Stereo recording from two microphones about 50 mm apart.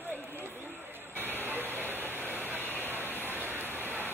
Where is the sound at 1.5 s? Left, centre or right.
Left.